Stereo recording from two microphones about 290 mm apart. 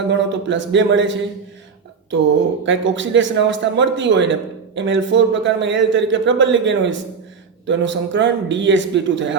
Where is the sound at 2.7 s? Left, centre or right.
Right.